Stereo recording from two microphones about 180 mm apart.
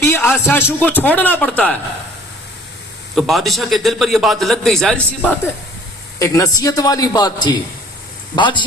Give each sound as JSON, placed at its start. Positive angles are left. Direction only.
{"t": 0.0, "sound": "a man's voice", "side_deg": 15}
{"t": 3.2, "sound": "a man's voice", "side_deg": 0}
{"t": 6.1, "sound": "a man's voice", "side_deg": 20}